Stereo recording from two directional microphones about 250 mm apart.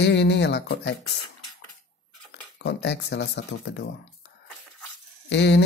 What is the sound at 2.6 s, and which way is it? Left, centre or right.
Speech, left.